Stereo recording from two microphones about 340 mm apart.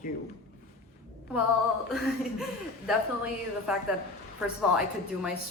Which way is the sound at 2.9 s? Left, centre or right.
Centre.